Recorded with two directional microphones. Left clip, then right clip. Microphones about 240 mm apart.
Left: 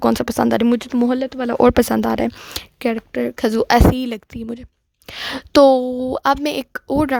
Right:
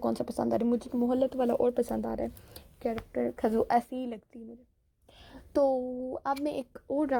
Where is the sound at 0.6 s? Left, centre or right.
Left.